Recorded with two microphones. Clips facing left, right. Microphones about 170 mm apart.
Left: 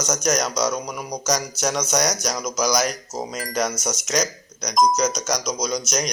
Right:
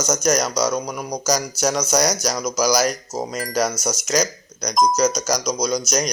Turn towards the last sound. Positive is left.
turn(degrees=0)  # may be behind; listen again after turning